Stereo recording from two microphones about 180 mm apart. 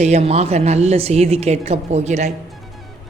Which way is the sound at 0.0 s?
35° right (ahead or behind).